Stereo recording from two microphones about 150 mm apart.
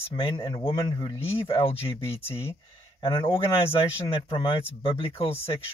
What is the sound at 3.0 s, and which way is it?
Speech, 35° left (ahead or behind).